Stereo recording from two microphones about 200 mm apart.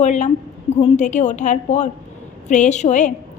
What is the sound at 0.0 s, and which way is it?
A woman's voice, 35° left (ahead or behind).